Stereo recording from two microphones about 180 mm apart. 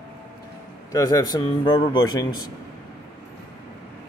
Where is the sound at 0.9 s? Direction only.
20° left (ahead or behind).